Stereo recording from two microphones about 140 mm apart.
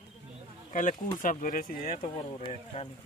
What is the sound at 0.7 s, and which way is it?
Speech, 65° left (ahead or behind).